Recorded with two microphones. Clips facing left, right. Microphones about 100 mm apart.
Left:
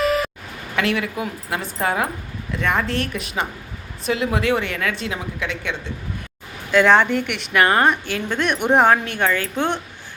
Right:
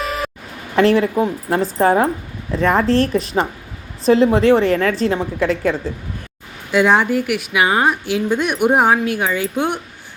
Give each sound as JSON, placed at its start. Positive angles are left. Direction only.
{"t": 0.0, "sound": "a sound", "side_deg": 0}
{"t": 0.8, "sound": "a woman's voice", "side_deg": -35}
{"t": 6.7, "sound": "a woman's voice", "side_deg": -15}